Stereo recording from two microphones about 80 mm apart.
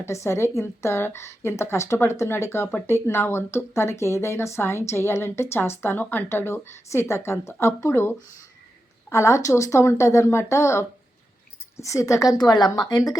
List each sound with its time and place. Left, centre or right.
0.0 s a woman's voice: left